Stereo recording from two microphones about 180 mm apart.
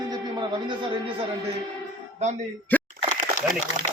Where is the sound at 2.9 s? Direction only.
45° left (ahead or behind).